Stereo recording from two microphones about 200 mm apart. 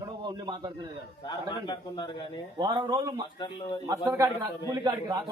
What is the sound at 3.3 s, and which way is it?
Speech, 25° left (ahead or behind).